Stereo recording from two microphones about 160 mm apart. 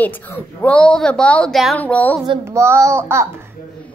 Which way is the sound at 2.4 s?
15° right (ahead or behind).